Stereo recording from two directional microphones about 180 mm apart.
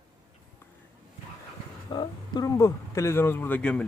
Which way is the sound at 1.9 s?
25° left (ahead or behind).